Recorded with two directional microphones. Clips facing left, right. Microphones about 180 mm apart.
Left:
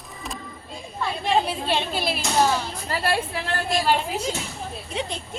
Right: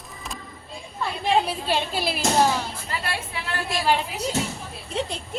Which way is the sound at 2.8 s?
40° left (ahead or behind).